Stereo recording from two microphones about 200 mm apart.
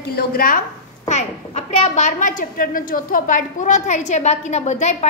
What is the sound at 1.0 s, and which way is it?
A woman's voice, 35° left (ahead or behind).